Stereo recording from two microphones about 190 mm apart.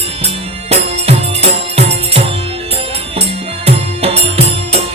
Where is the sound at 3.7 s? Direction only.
30° right (ahead or behind).